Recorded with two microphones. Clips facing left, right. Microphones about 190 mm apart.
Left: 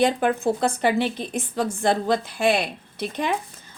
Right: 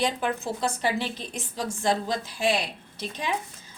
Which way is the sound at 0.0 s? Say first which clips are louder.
Left 7 dB; 55° left (ahead or behind).